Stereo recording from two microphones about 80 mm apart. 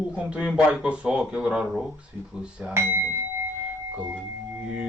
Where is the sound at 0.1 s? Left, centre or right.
Centre.